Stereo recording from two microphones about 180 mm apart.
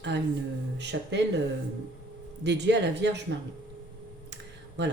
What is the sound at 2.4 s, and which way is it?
Speech, 70° right (ahead or behind).